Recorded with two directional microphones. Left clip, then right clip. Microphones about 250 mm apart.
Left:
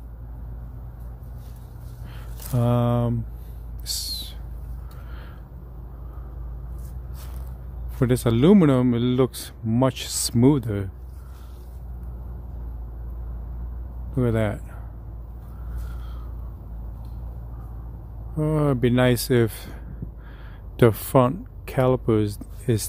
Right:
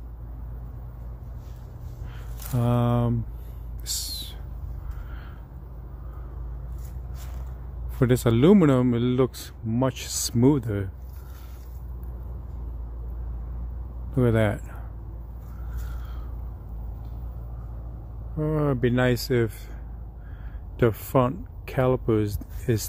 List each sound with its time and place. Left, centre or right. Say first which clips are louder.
2.5 s speech: left 2 dB; centre
3.8 s a sound: left 2 dB; centre
8.0 s a man's voice: even; centre
14.1 s speech: right 1 dB; centre
18.4 s a man's voice: left 2 dB; centre